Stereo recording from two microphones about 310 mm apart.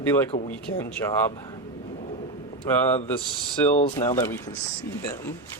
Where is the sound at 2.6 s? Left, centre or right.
Centre.